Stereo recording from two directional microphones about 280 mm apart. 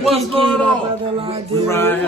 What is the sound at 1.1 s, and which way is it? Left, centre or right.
Speech, centre.